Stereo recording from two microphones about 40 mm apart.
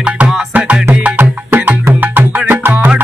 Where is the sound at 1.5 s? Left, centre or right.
Right.